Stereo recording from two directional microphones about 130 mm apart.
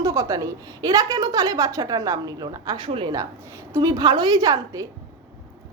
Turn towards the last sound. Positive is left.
turn(degrees=-30)  # may be behind; listen again after turning